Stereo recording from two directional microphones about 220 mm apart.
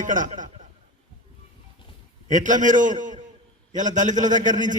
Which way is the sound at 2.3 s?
35° right (ahead or behind).